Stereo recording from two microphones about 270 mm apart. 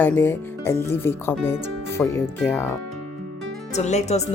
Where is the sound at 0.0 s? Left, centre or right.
Centre.